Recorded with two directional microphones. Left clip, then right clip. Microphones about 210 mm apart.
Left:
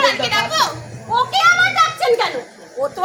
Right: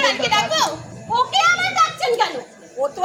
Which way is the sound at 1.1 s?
Centre (ahead or behind).